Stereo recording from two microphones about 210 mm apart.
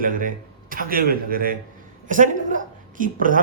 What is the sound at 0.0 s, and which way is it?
A man's voice, 40° right (ahead or behind).